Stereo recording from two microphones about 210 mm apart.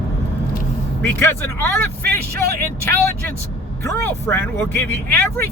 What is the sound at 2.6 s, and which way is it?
Speech, 10° left (ahead or behind).